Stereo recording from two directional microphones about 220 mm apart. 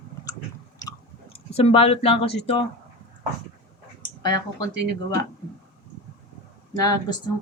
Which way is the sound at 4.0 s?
20° left (ahead or behind).